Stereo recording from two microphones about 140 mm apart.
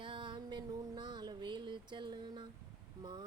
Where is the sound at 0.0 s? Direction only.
35° right (ahead or behind).